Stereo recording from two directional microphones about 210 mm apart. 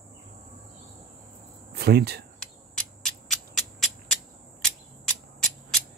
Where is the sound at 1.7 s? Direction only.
50° right (ahead or behind).